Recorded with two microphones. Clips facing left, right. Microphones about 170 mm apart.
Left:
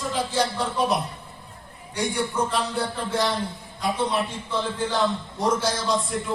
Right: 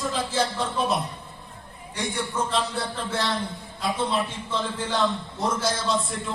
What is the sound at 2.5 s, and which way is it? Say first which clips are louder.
Speech: left 1 dB; 15° left (ahead or behind).